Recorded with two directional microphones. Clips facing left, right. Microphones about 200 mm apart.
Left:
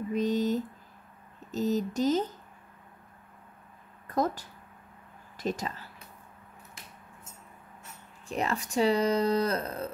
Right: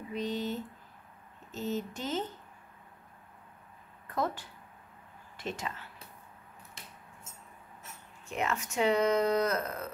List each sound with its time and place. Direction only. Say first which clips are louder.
0.1 s speech: left 7 dB; 45° left (ahead or behind)
4.1 s speech: left 4 dB; 40° left (ahead or behind)
8.3 s speech: left 2 dB; 35° left (ahead or behind)